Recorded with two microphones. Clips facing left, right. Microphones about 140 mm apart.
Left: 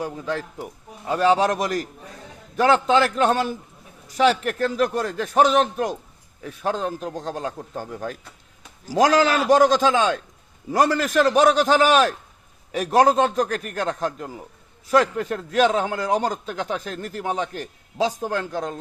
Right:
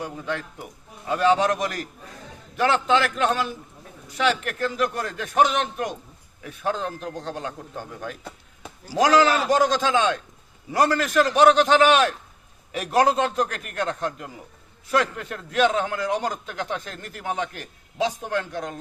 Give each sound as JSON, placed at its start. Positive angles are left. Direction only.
{"t": 0.0, "sound": "a man's voice", "side_deg": 40}